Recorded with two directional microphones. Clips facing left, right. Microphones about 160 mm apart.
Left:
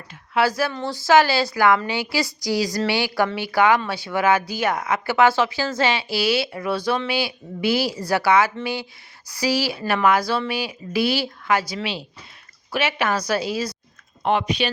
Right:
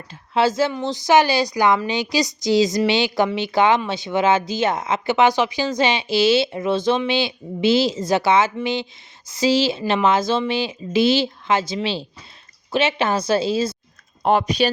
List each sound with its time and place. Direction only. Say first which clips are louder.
0.1 s speech: right 2 dB; 25° right (ahead or behind)
14.2 s speech: right 3 dB; 40° right (ahead or behind)